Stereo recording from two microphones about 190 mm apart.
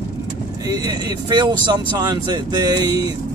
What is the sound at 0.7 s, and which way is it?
Speech, 20° right (ahead or behind).